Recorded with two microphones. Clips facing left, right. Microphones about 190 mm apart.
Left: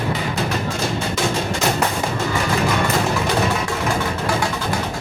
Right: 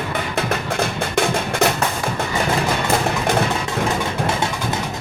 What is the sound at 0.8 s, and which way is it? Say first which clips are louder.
Music: right 2 dB; 60° right (ahead or behind).